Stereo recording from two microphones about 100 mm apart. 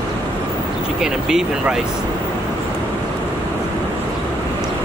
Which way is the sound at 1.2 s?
5° right (ahead or behind).